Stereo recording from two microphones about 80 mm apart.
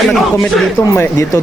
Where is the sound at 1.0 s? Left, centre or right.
Left.